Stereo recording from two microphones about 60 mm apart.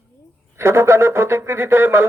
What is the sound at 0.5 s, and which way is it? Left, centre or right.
Speech, right.